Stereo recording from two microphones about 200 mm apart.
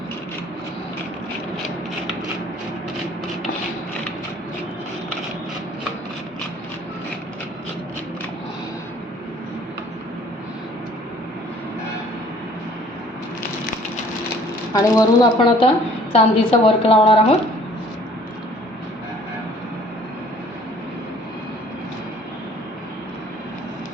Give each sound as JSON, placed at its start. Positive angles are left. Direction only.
{"t": 14.7, "sound": "a woman's voice", "side_deg": 15}